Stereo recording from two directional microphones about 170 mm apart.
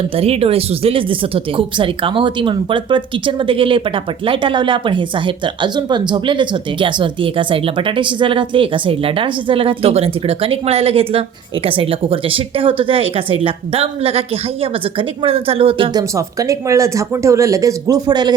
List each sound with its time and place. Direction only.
0.2 s speech: 35° right (ahead or behind)